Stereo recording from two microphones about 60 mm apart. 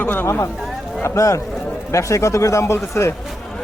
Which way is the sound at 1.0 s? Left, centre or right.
Left.